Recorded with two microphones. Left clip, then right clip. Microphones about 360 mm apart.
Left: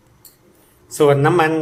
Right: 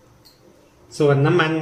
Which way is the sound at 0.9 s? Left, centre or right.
Centre.